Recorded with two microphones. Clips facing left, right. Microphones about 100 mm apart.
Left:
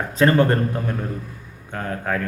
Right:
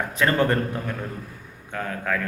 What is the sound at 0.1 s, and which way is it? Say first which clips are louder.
A man's voice: left 5 dB; 30° left (ahead or behind).